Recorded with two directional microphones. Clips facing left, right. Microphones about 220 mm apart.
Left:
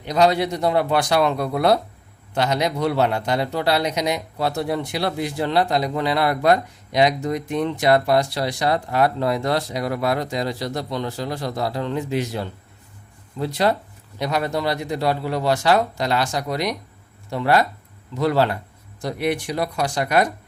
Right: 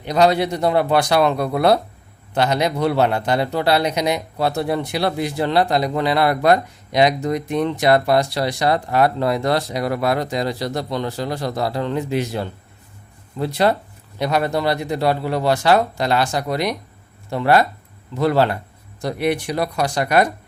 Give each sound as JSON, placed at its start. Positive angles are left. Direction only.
{"t": 0.0, "sound": "a man's voice", "side_deg": -60}